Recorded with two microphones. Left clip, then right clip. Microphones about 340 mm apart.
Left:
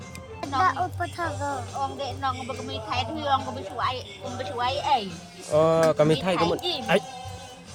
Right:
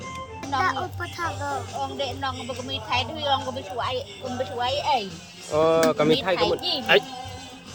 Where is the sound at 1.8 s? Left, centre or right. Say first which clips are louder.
Left 1 dB; centre.